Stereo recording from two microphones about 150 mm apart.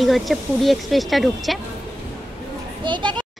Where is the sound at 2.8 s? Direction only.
30° right (ahead or behind).